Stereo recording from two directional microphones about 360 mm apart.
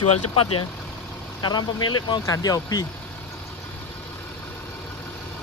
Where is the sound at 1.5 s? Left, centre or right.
Centre.